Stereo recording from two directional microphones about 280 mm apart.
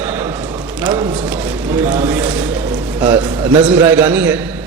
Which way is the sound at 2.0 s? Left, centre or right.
Centre.